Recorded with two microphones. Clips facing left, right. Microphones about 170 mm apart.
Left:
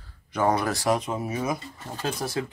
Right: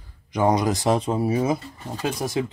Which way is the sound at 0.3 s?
15° right (ahead or behind).